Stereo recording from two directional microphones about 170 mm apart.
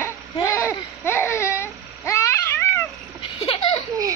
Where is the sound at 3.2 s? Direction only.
30° left (ahead or behind).